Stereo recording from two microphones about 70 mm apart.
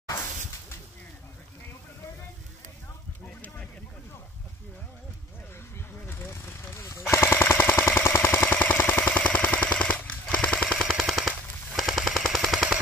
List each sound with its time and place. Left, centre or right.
0.1 s a sound: left
6.0 s machine gun: left; by 11.0 s centre
11.0 s machine gun: centre